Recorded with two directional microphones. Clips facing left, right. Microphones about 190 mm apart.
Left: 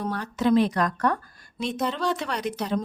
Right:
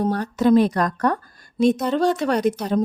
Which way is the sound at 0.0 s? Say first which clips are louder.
Right 6 dB; 40° right (ahead or behind).